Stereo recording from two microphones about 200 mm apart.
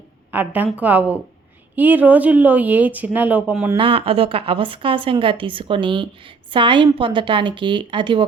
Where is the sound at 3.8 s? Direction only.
25° right (ahead or behind).